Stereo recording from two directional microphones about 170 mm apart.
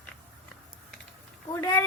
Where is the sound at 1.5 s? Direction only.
15° left (ahead or behind).